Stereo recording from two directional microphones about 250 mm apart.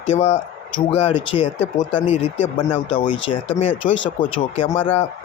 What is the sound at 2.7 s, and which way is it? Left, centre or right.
Speech, centre.